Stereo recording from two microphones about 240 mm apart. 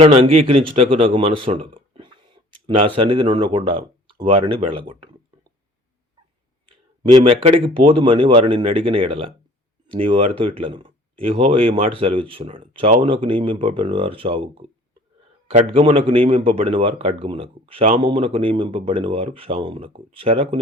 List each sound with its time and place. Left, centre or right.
0.0 s speech: right
6.7 s a man's voice: right